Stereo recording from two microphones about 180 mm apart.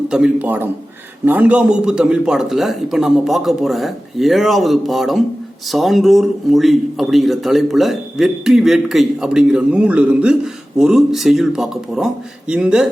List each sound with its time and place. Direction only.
0.1 s a man's voice: 5° right (ahead or behind)